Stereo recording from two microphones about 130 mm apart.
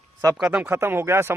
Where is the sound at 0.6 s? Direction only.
15° right (ahead or behind).